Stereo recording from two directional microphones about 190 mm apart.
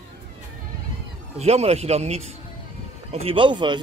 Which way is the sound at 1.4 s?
35° right (ahead or behind).